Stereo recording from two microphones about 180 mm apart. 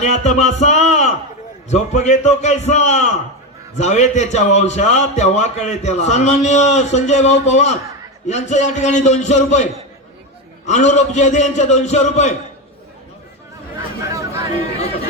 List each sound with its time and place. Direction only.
0.0 s a sound: 40° left (ahead or behind)
1.7 s a man's voice: 40° left (ahead or behind)
10.7 s a man's voice: 40° left (ahead or behind)
14.1 s chatter: 15° right (ahead or behind)